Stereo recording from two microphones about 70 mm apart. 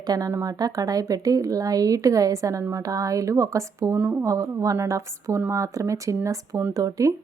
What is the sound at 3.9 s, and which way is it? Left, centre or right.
Speech, right.